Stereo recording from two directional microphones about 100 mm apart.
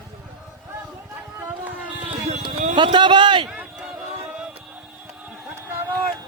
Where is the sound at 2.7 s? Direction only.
50° right (ahead or behind).